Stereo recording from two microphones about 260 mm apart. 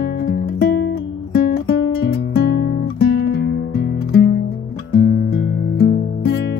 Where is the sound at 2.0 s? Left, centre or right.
Left.